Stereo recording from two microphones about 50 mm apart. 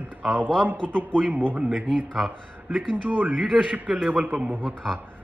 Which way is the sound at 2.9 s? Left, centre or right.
Right.